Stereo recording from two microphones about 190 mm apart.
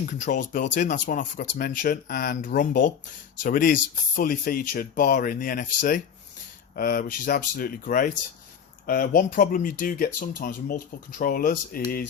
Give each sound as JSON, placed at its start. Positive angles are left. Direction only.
{"t": 0.0, "sound": "speech", "side_deg": 40}